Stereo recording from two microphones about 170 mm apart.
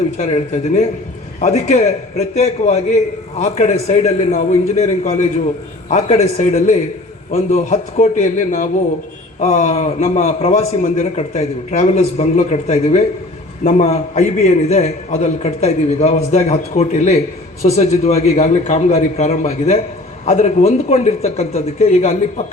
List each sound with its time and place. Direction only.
0.2 s a man's voice: 40° left (ahead or behind)